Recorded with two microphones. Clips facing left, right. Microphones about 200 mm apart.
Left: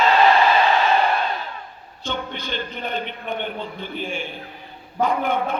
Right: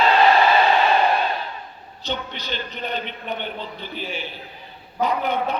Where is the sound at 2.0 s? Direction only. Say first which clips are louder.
Left 1 dB; 50° left (ahead or behind).